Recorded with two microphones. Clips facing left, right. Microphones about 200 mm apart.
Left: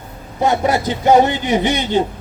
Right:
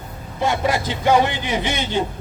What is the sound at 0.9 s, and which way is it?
Speech, 45° left (ahead or behind).